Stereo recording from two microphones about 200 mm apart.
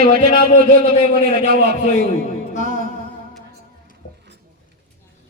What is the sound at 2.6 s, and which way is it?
Music, 40° right (ahead or behind).